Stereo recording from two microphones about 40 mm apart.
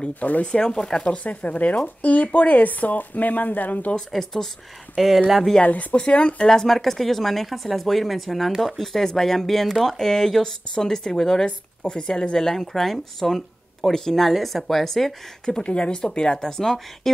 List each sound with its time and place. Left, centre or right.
0.2 s speech: left
0.5 s speech: centre
1.0 s speech: left
4.1 s speech: centre
4.9 s speech: centre
5.6 s speech: left
5.9 s speech: left
6.4 s speech: centre
12.7 s speech: centre
15.6 s speech: left
17.0 s a sound: centre